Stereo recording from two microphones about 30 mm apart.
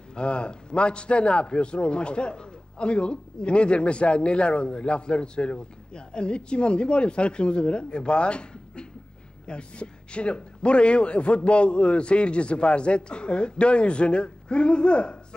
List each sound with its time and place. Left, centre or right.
0.1 s a man's voice: left